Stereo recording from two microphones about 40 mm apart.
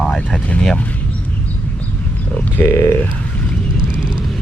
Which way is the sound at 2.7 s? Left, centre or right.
Left.